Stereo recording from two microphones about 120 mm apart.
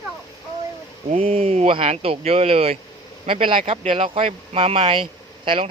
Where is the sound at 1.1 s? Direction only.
65° right (ahead or behind).